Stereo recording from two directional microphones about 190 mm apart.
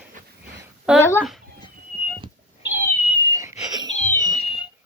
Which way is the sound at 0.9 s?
15° left (ahead or behind).